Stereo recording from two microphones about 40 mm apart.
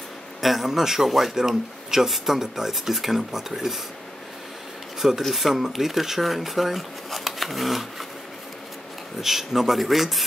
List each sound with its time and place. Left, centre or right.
0.4 s speech: centre
5.3 s speech: centre
9.2 s speech: centre